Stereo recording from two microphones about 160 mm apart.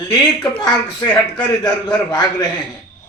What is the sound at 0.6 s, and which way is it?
A man's voice, 25° left (ahead or behind).